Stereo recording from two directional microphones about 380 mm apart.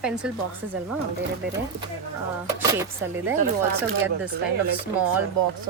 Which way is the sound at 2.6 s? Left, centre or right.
Centre.